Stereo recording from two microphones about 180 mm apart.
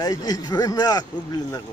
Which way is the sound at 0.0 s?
20° left (ahead or behind).